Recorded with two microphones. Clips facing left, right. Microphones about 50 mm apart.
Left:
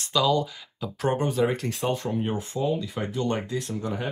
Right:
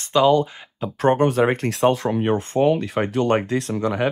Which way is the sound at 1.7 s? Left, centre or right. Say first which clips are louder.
Right 8 dB; right.